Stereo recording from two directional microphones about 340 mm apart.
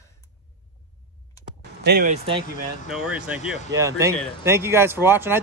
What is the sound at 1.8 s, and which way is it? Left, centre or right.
Speech, right.